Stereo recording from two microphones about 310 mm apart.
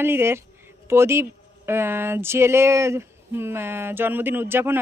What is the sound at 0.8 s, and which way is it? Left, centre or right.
Speech, centre.